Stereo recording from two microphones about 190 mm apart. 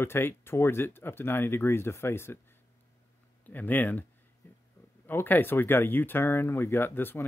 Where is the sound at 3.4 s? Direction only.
10° left (ahead or behind).